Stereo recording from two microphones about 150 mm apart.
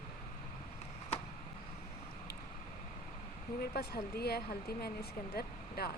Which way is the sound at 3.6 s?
90° left.